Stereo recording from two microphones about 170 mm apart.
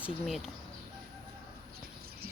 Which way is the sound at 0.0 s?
Centre (ahead or behind).